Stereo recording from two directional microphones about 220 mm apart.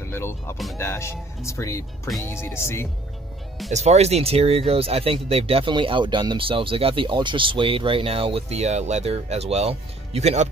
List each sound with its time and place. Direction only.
0.1 s music: 10° left (ahead or behind)
0.7 s speech: 10° left (ahead or behind)
3.7 s speech: 30° right (ahead or behind)